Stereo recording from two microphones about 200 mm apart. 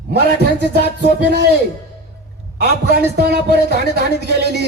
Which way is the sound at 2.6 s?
50° right (ahead or behind).